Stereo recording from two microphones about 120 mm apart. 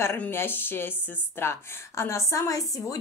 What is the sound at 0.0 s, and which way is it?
A woman's voice, 20° left (ahead or behind).